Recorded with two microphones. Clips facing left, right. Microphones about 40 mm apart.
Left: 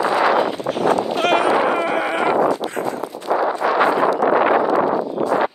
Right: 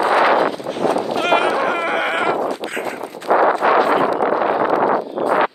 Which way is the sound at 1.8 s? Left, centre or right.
Right.